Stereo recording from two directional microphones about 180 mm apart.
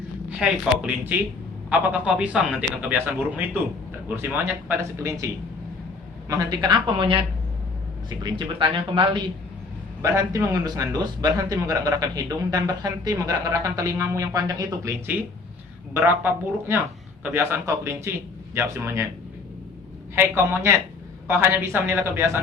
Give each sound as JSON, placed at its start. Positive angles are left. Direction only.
{"t": 0.3, "sound": "a man's voice", "side_deg": -5}
{"t": 10.0, "sound": "a man's voice", "side_deg": -15}
{"t": 20.1, "sound": "a man's voice", "side_deg": -15}